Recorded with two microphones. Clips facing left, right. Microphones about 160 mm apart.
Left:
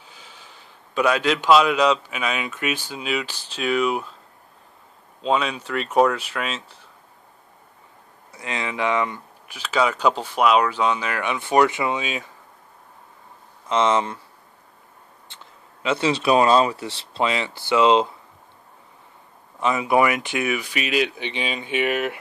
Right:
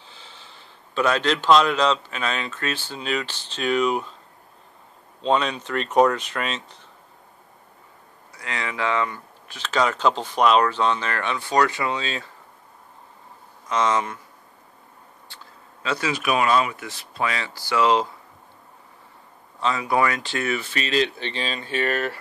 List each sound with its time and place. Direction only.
0.0 s a man's voice: 10° left (ahead or behind)
5.2 s speech: 5° left (ahead or behind)
8.3 s speech: 20° left (ahead or behind)
13.7 s speech: 25° left (ahead or behind)
15.2 s speech: 20° left (ahead or behind)
19.6 s speech: 20° left (ahead or behind)